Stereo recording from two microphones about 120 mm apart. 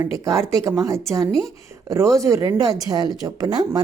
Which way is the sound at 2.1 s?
25° right (ahead or behind).